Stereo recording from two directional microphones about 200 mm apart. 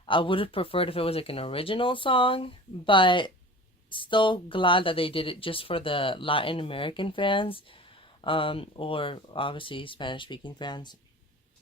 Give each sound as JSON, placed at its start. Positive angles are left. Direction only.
{"t": 0.0, "sound": "speech", "side_deg": 25}